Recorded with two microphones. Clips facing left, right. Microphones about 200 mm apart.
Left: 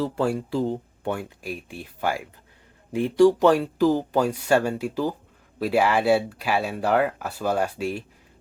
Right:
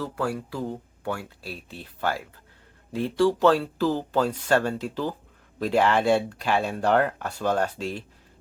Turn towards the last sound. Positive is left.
turn(degrees=10)  # may be behind; listen again after turning